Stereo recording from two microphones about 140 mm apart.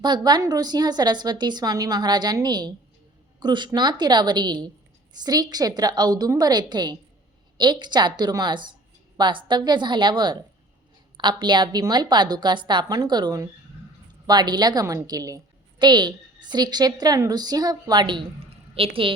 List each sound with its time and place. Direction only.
0.0 s a woman's voice: 30° right (ahead or behind)